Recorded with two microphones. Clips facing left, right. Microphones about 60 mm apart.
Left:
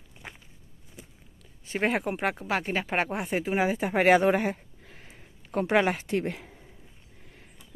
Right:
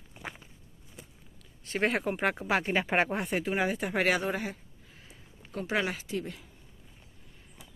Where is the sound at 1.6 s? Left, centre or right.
Centre.